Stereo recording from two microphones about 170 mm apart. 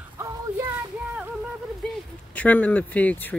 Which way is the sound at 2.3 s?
10° left (ahead or behind).